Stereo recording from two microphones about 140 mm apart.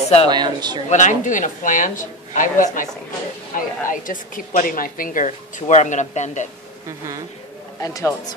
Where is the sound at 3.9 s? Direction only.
75° left (ahead or behind).